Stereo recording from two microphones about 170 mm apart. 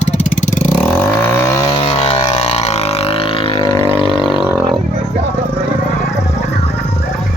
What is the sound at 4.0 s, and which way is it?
Vehicle, 30° left (ahead or behind).